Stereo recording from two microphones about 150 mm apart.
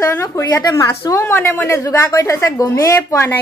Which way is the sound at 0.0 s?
20° left (ahead or behind).